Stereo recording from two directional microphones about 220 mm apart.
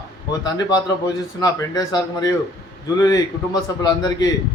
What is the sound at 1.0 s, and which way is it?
A man's voice, 15° left (ahead or behind).